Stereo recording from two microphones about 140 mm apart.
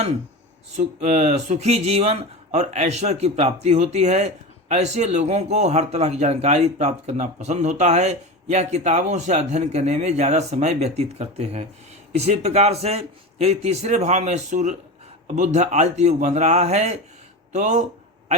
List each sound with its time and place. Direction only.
0.8 s a man's voice: 55° right (ahead or behind)